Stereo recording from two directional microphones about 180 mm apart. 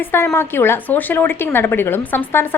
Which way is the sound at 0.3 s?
15° left (ahead or behind).